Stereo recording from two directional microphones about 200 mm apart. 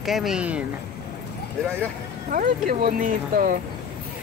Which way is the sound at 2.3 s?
45° right (ahead or behind).